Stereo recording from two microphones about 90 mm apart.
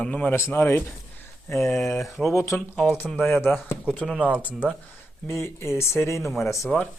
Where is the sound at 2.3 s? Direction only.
35° left (ahead or behind).